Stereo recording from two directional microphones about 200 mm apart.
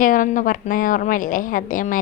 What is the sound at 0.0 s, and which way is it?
A woman's voice, 40° left (ahead or behind).